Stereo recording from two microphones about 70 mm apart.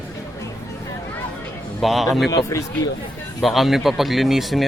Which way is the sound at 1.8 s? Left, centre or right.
Centre.